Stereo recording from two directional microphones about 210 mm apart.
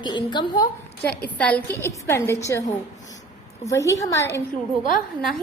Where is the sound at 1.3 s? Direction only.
5° left (ahead or behind).